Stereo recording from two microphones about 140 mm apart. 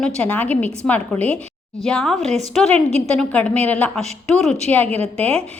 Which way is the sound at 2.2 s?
55° right (ahead or behind).